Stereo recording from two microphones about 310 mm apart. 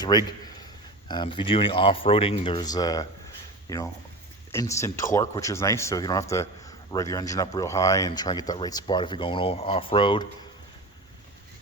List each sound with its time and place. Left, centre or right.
0.0 s a man's voice: centre